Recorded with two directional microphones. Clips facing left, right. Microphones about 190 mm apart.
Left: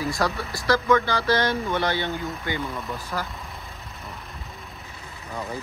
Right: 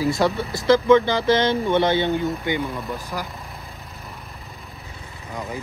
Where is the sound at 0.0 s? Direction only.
25° right (ahead or behind).